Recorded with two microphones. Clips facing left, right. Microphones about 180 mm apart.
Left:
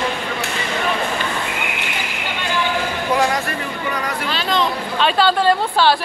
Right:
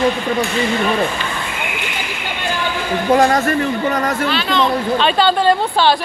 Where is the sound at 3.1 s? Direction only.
45° right (ahead or behind).